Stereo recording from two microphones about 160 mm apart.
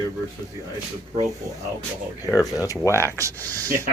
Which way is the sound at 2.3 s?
20° left (ahead or behind).